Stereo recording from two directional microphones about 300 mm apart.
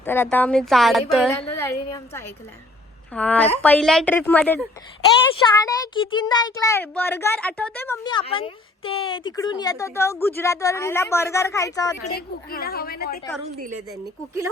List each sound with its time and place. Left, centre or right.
0.0 s a woman's voice: centre
12.0 s a woman's voice: left
13.4 s a woman's voice: right
14.0 s speech: centre